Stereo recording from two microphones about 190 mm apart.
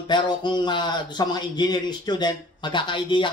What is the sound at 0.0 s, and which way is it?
Speech, 25° left (ahead or behind).